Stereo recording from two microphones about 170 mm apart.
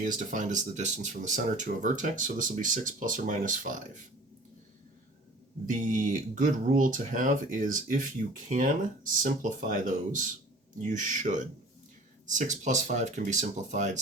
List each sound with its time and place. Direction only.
0.0 s speech: 50° right (ahead or behind)
5.6 s speech: 50° right (ahead or behind)